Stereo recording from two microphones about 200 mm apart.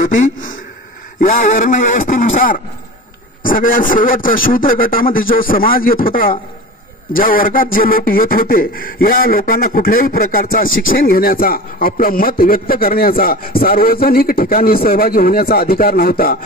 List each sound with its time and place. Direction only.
1.4 s speech: 40° left (ahead or behind)